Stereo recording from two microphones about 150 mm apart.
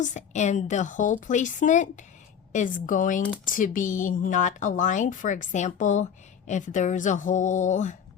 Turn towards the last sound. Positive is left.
turn(degrees=55)  # may be behind; listen again after turning